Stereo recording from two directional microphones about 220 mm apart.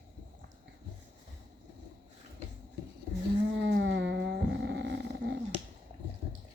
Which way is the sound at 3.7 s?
50° right (ahead or behind).